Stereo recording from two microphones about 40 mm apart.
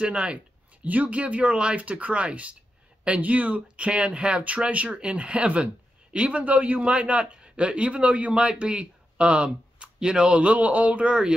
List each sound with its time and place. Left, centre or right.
0.0 s speech: right
0.8 s a man's voice: right